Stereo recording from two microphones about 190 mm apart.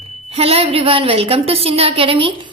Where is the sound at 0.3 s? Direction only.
30° right (ahead or behind).